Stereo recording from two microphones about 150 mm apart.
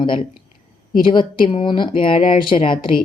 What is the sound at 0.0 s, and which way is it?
Speech, 35° left (ahead or behind).